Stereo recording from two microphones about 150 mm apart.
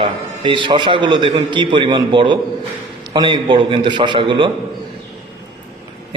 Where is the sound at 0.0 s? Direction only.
35° right (ahead or behind).